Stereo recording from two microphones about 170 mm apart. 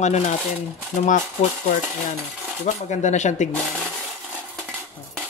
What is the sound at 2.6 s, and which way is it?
Speech, 45° left (ahead or behind).